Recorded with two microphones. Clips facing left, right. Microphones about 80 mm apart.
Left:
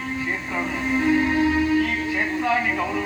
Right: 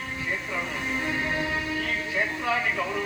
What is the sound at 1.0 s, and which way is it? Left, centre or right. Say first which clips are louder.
Music: left 11 dB; left.